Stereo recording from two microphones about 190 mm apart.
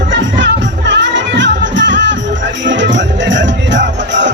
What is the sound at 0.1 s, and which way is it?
Music, 70° right (ahead or behind).